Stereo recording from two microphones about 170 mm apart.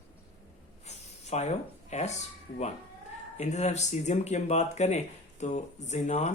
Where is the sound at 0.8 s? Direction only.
40° left (ahead or behind).